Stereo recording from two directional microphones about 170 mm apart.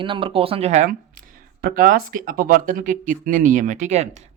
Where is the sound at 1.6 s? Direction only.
55° right (ahead or behind).